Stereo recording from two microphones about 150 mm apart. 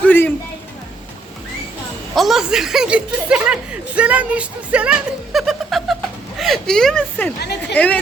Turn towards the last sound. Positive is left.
turn(degrees=10)  # may be behind; listen again after turning